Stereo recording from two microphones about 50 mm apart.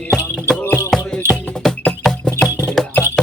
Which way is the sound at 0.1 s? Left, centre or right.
Centre.